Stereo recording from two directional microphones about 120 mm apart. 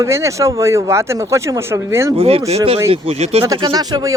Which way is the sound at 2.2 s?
55° right (ahead or behind).